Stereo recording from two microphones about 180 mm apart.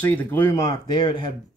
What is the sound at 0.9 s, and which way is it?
Speech, 25° left (ahead or behind).